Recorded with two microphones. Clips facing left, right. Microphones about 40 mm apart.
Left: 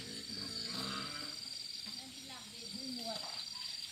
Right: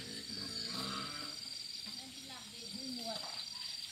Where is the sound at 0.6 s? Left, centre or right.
Centre.